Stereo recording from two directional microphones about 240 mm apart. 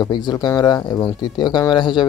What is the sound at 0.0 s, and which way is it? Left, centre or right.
Speech, centre.